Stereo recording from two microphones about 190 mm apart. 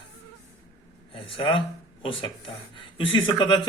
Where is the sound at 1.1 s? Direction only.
30° left (ahead or behind).